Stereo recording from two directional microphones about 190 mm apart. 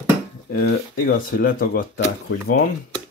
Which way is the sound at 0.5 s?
45° left (ahead or behind).